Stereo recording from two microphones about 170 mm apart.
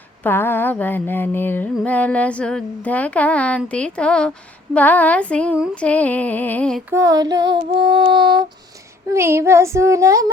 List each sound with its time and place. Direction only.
0.2 s mantra: 10° left (ahead or behind)
6.9 s female singing: 20° right (ahead or behind)
9.1 s child singing: 15° right (ahead or behind)